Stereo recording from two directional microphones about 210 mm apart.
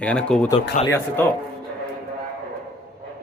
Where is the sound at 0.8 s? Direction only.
35° left (ahead or behind).